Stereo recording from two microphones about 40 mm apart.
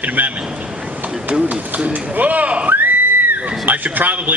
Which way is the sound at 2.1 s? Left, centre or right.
Right.